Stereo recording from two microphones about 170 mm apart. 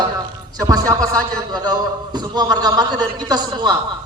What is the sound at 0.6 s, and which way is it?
A man's voice, 20° right (ahead or behind).